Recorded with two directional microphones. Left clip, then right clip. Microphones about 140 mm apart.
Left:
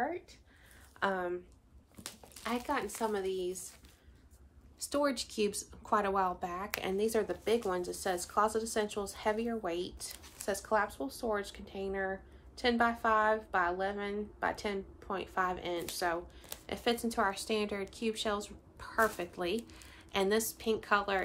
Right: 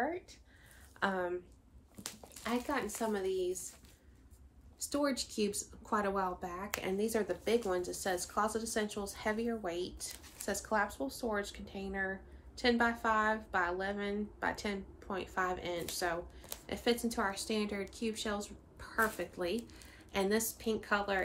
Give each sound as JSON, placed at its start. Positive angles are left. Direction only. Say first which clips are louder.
{"t": 0.9, "sound": "a woman's voice", "louder": "left 1 dB", "side_deg": 10}
{"t": 4.7, "sound": "a woman's voice", "louder": "left 2 dB", "side_deg": 20}